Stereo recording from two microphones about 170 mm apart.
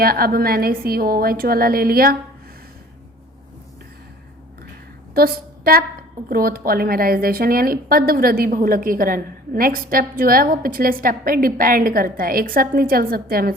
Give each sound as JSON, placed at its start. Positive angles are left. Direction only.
{"t": 0.0, "sound": "a woman's voice", "side_deg": -60}
{"t": 5.1, "sound": "a woman's voice", "side_deg": -60}